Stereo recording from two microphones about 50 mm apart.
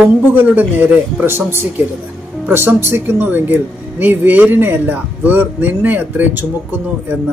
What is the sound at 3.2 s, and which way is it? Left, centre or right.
Speech, right.